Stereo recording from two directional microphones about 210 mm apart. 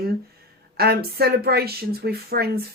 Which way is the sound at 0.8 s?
50° right (ahead or behind).